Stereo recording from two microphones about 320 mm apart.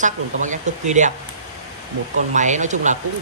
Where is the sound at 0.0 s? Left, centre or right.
Right.